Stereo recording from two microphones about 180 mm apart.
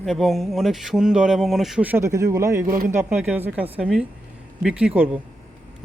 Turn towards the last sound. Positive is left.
turn(degrees=-10)  # may be behind; listen again after turning